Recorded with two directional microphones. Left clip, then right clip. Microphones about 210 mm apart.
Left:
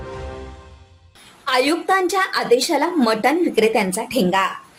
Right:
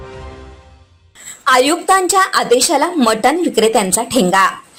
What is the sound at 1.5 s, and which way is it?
A woman's voice, 10° right (ahead or behind).